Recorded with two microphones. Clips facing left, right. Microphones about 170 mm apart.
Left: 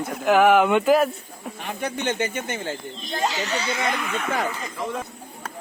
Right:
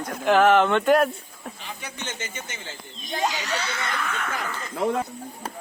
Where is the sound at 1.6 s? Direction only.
55° left (ahead or behind).